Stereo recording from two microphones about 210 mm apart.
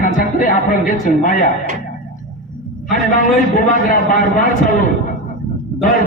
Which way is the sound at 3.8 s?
40° left (ahead or behind).